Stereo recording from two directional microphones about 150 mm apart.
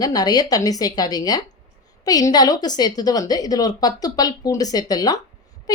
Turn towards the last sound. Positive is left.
turn(degrees=25)  # may be behind; listen again after turning